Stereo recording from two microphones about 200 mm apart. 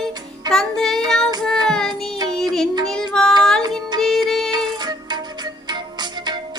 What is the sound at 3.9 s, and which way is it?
Music, 20° right (ahead or behind).